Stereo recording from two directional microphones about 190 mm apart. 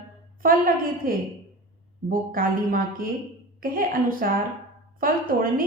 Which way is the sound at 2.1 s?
50° right (ahead or behind).